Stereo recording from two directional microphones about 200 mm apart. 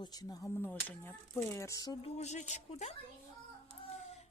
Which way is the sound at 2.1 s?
35° left (ahead or behind).